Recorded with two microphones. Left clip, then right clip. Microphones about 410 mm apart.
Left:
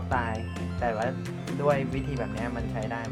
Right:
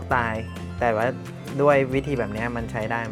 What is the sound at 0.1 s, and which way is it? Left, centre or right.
Music, right.